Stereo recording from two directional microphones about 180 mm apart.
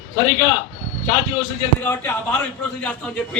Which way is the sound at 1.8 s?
10° left (ahead or behind).